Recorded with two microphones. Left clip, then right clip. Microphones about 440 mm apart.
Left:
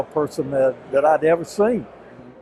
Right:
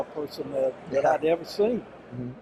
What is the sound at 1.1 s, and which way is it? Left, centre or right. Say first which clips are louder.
Speech: left 7 dB; left.